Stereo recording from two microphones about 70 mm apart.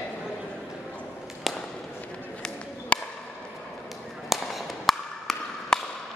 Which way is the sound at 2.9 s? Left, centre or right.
Centre.